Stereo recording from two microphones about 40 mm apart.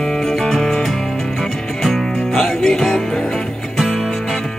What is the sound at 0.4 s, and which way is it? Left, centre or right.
Music, centre.